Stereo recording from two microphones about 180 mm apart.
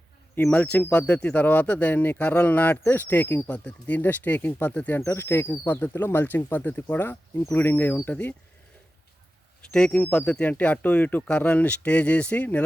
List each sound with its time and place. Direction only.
0.3 s speech: 10° left (ahead or behind)
9.7 s speech: 5° left (ahead or behind)